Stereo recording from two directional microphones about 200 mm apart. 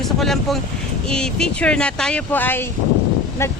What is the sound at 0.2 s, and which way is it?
Speech, centre (ahead or behind).